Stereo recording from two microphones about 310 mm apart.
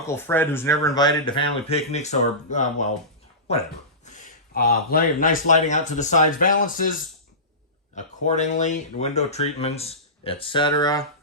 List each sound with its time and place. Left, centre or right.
0.1 s speech: centre; by 6.9 s left
7.9 s speech: left